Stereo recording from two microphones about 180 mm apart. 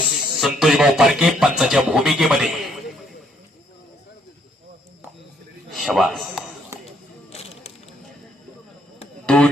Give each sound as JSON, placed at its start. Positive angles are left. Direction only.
{"t": 0.0, "sound": "speech", "side_deg": 0}
{"t": 5.7, "sound": "a sound", "side_deg": 0}
{"t": 7.3, "sound": "insect", "side_deg": 35}
{"t": 9.2, "sound": "music", "side_deg": 5}